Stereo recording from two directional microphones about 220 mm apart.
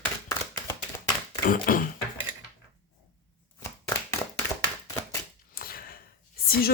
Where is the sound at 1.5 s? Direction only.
40° left (ahead or behind).